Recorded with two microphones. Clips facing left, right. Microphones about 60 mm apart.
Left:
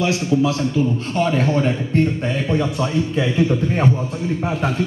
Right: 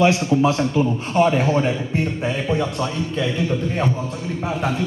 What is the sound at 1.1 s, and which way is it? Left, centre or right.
A man's voice, centre.